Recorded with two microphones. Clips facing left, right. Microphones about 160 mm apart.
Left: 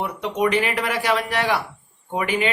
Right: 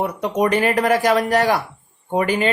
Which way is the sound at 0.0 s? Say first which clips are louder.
Right 3 dB; 45° right (ahead or behind).